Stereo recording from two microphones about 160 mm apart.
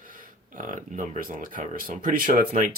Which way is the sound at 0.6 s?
55° right (ahead or behind).